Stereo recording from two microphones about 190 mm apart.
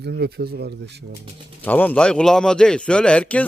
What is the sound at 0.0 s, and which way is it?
Speech, 60° right (ahead or behind).